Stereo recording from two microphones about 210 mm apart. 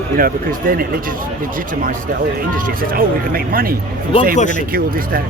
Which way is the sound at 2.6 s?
45° right (ahead or behind).